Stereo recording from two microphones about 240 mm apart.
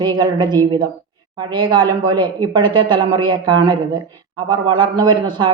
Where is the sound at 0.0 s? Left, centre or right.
Centre.